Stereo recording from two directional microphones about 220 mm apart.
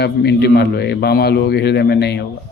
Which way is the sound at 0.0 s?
50° left (ahead or behind).